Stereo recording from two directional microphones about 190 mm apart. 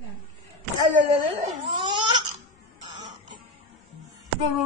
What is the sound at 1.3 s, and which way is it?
Crying, 25° right (ahead or behind).